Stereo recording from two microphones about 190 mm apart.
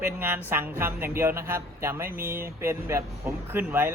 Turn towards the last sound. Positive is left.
turn(degrees=-10)  # may be behind; listen again after turning